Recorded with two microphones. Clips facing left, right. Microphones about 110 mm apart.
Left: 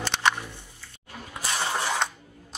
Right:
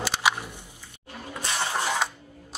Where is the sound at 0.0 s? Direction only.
10° right (ahead or behind).